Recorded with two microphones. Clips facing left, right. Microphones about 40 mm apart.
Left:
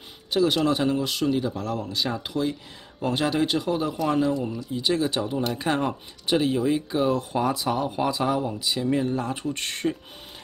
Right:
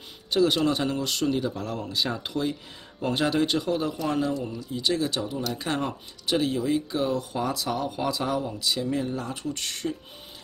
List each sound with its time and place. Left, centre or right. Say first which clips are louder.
0.3 s speech: left 1 dB; centre
3.9 s speech: left 3 dB; centre
5.1 s speech: left 3 dB; left
5.6 s speech: left 4 dB; centre; by 9.9 s left